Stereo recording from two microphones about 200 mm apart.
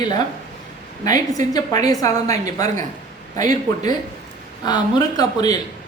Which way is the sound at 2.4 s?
40° right (ahead or behind).